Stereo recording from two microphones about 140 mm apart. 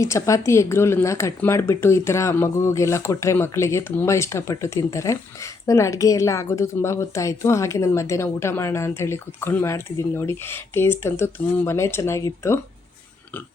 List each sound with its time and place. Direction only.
0.0 s speech: 20° left (ahead or behind)